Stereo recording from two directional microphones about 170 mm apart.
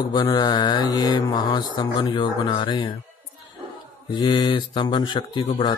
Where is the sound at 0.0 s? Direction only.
25° left (ahead or behind).